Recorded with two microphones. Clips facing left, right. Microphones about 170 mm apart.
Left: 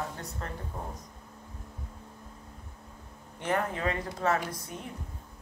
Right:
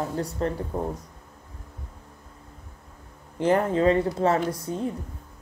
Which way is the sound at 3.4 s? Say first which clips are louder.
Right 9 dB; 30° right (ahead or behind).